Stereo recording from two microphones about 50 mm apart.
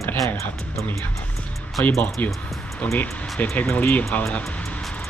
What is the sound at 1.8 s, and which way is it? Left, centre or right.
Speech, left.